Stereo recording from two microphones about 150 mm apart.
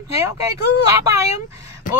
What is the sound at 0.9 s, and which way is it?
Speech, 20° right (ahead or behind).